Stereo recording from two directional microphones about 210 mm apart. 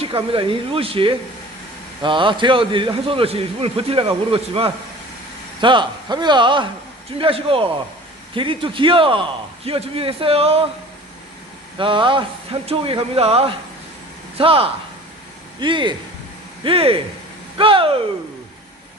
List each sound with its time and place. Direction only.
0.0 s a man's voice: 25° right (ahead or behind)
11.8 s a man's voice: 25° right (ahead or behind)